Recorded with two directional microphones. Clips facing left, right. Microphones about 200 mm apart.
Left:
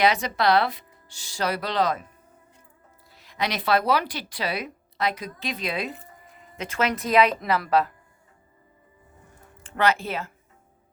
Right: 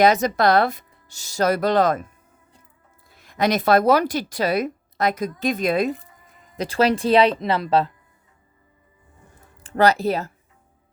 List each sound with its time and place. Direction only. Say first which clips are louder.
0.0 s a woman's voice: right 5 dB; 45° right (ahead or behind)
3.1 s a woman's voice: right 8 dB; 50° right (ahead or behind)
6.6 s speech: right 7 dB; 35° right (ahead or behind)
9.6 s speech: right 5 dB; 40° right (ahead or behind)